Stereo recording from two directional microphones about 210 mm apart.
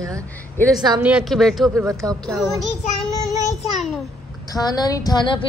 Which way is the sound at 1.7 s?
15° right (ahead or behind).